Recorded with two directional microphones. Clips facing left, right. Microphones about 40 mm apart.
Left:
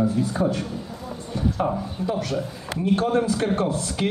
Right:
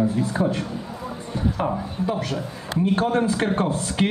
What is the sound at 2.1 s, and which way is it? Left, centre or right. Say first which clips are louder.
A man's voice: left 2 dB; right.